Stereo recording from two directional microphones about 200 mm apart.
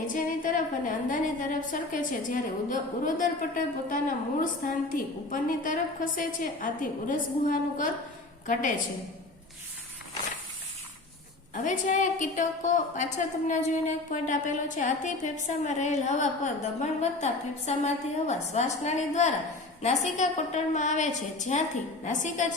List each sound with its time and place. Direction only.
0.1 s a woman's voice: 40° left (ahead or behind)
11.5 s a woman's voice: 40° left (ahead or behind)